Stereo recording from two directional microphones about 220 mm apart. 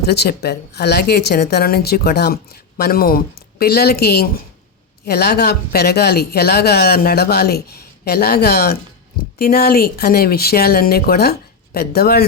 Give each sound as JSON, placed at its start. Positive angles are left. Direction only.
{"t": 0.0, "sound": "speech", "side_deg": 45}